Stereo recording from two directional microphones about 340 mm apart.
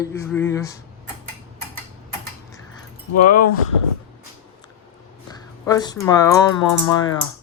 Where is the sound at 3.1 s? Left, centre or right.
Left.